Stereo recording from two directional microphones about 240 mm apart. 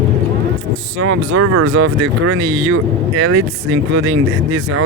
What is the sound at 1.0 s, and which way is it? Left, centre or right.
Speech, right.